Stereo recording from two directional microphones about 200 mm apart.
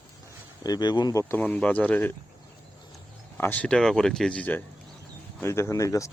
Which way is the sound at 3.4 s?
10° left (ahead or behind).